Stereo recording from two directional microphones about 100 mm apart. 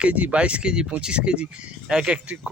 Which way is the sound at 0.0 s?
15° right (ahead or behind).